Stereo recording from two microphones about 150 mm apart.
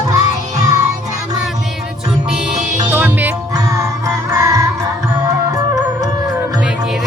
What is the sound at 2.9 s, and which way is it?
Music, 10° right (ahead or behind).